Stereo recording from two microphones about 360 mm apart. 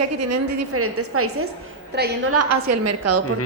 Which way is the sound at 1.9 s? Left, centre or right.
Right.